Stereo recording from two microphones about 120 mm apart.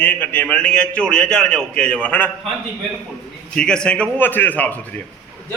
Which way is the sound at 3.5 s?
5° left (ahead or behind).